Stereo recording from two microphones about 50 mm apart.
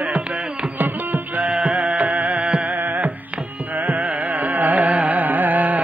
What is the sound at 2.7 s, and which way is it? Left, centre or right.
Carnatic music, right.